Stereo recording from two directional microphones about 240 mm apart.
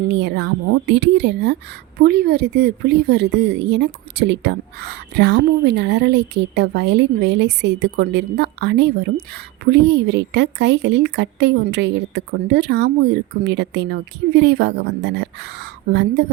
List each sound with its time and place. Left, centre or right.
0.1 s a woman's voice: right